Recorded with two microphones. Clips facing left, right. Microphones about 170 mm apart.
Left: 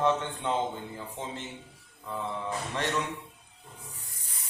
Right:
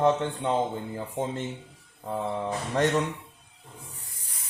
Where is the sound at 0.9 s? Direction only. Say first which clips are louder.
Right 7 dB; 45° right (ahead or behind).